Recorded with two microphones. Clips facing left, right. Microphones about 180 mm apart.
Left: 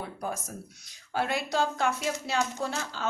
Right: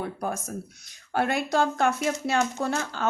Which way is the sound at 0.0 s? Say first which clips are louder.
Right 4 dB; 55° right (ahead or behind).